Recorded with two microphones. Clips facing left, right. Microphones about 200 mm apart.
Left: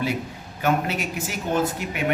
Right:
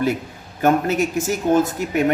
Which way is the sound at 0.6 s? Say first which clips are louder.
Right 6 dB; 45° right (ahead or behind).